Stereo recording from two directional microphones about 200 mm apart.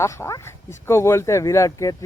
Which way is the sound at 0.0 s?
15° left (ahead or behind).